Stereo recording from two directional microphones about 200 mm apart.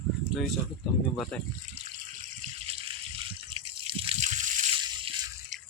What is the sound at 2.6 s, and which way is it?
Water, 30° right (ahead or behind).